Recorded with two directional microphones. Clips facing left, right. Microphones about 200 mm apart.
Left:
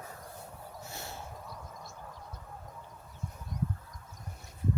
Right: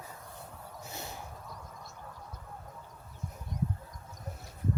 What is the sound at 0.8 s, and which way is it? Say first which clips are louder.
Snort: right 2 dB; 20° right (ahead or behind).